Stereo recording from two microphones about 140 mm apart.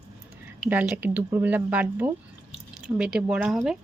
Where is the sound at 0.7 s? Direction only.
10° right (ahead or behind).